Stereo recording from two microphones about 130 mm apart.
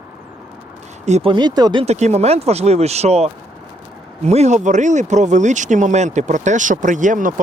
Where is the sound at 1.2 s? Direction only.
35° right (ahead or behind).